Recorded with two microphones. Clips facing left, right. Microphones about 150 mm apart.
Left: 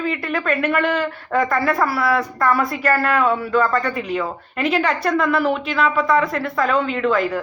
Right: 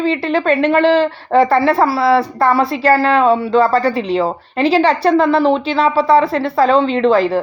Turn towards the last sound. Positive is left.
turn(degrees=-30)  # may be behind; listen again after turning